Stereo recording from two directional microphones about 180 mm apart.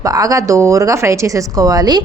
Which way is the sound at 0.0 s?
20° right (ahead or behind).